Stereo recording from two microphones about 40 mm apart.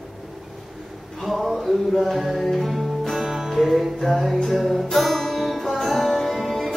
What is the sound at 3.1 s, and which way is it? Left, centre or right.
Music, centre.